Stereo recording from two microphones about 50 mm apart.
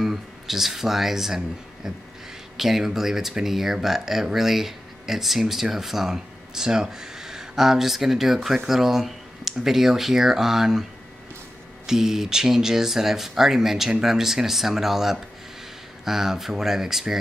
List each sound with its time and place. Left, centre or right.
0.0 s speech: centre
2.5 s speech: centre